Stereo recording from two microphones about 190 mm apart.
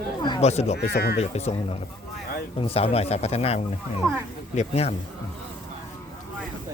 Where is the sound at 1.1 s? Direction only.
35° left (ahead or behind).